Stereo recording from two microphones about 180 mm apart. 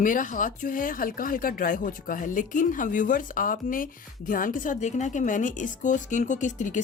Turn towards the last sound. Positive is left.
turn(degrees=45)  # may be behind; listen again after turning